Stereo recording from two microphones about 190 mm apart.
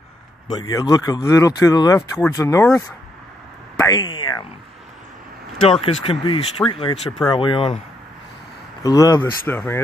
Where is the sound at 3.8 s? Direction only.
20° left (ahead or behind).